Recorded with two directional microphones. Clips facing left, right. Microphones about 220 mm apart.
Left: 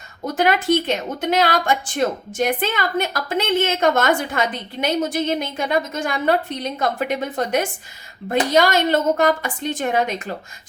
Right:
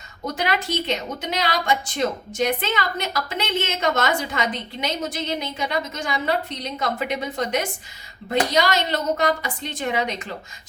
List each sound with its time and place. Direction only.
0.3 s a woman's voice: 50° left (ahead or behind)